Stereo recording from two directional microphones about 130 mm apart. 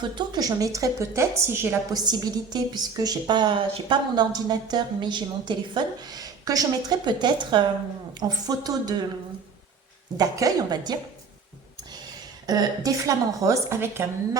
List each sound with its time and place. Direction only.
0.0 s a woman's voice: 35° right (ahead or behind)
10.2 s a woman's voice: 25° right (ahead or behind)